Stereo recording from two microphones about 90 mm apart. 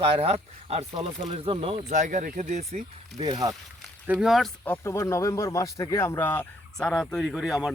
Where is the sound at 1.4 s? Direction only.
90° right.